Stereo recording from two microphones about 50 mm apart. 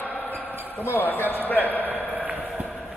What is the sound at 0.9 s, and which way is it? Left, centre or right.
Speech, left.